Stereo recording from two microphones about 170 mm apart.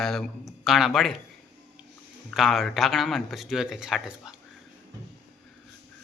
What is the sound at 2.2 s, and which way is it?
Speech, centre (ahead or behind).